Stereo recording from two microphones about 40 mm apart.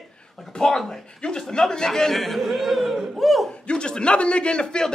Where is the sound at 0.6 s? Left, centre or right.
Centre.